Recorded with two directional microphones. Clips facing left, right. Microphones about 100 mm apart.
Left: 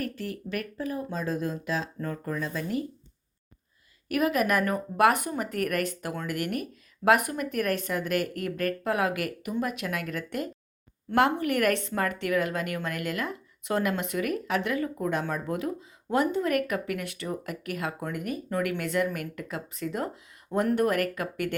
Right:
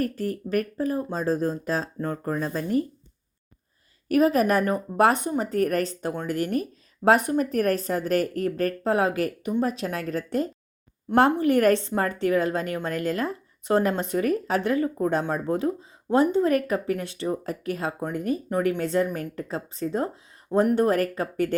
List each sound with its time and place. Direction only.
0.0 s a woman's voice: 40° right (ahead or behind)
4.1 s a woman's voice: 35° right (ahead or behind)